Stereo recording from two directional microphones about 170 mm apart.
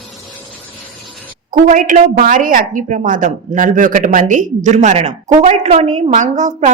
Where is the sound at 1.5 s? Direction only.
50° right (ahead or behind).